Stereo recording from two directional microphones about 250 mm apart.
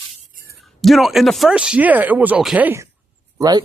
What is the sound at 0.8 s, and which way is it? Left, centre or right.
Speech, centre.